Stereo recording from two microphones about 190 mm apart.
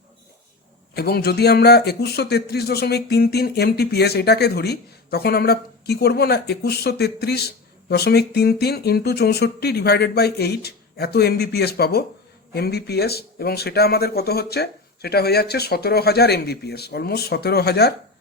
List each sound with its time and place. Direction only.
0.9 s speech: 55° left (ahead or behind)